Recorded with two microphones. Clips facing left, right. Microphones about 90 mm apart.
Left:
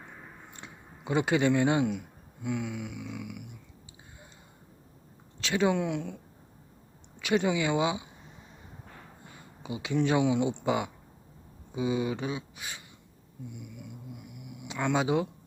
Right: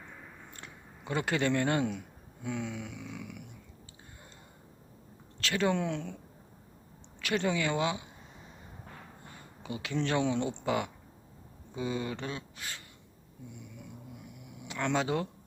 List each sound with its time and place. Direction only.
0.5 s a man's voice: 20° left (ahead or behind)
5.4 s speech: 15° left (ahead or behind)
7.2 s speech: 15° left (ahead or behind)
9.6 s speech: 20° left (ahead or behind)
13.5 s snoring: 5° left (ahead or behind)
14.7 s speech: 15° left (ahead or behind)